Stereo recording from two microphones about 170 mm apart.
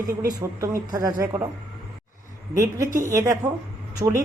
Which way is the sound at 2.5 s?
15° right (ahead or behind).